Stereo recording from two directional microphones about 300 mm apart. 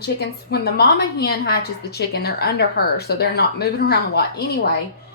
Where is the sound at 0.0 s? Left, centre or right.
Left.